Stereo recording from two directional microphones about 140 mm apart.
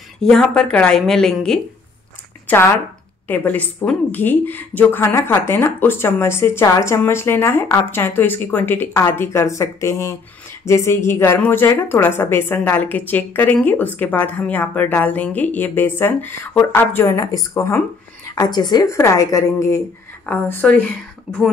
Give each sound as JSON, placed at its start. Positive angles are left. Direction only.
{"t": 0.2, "sound": "a woman's voice", "side_deg": 5}
{"t": 2.4, "sound": "a woman's voice", "side_deg": 15}